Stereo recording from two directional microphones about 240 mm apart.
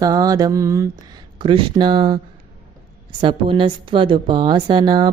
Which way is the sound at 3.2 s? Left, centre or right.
Right.